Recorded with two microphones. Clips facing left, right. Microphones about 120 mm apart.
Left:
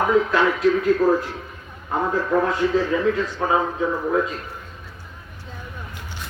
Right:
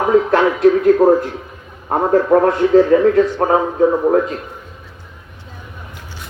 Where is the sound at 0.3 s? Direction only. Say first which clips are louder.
Right 6 dB; 55° right (ahead or behind).